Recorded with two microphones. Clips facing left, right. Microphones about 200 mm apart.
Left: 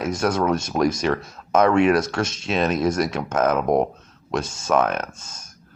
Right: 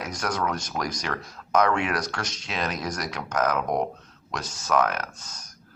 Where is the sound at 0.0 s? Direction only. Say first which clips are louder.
Left 7 dB; 25° left (ahead or behind).